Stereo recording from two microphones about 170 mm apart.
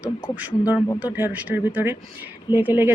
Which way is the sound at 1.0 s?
10° right (ahead or behind).